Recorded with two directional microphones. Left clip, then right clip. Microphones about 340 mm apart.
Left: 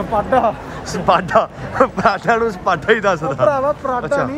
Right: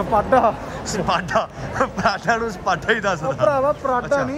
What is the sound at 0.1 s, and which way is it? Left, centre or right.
Speech, centre.